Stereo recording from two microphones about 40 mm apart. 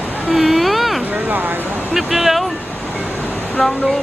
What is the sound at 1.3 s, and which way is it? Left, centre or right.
Speech, right.